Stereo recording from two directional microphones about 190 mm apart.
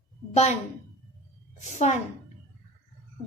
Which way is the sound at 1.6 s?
35° left (ahead or behind).